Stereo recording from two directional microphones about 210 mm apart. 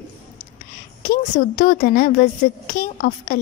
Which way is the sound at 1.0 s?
40° left (ahead or behind).